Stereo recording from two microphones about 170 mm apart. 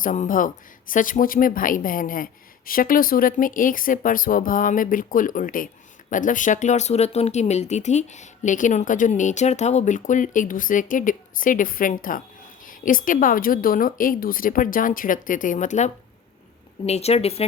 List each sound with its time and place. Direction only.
0.0 s speech: 50° left (ahead or behind)